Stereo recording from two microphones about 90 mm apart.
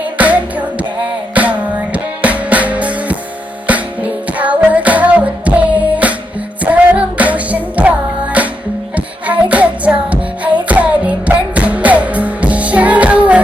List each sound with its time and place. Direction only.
0.2 s music: 15° right (ahead or behind)